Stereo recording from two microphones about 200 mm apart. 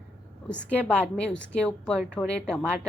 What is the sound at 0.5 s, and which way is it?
A woman's voice, 5° left (ahead or behind).